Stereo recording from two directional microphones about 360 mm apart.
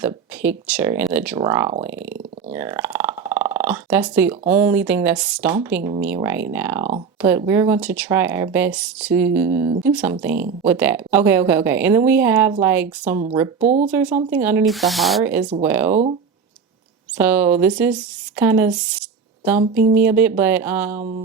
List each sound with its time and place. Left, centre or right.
0.0 s speech: centre
17.2 s speech: centre
19.7 s speech: right
20.0 s speech: centre